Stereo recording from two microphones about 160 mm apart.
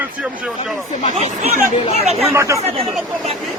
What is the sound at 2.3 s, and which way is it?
Speech, 20° right (ahead or behind).